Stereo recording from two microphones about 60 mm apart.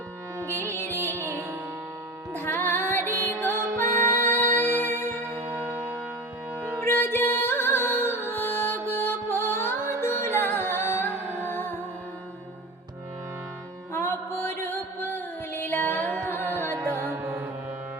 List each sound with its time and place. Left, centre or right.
1.1 s music: right
2.3 s music: left
5.3 s church bell: right
6.8 s music: left
13.9 s music: left
16.7 s music: right
17.0 s music: right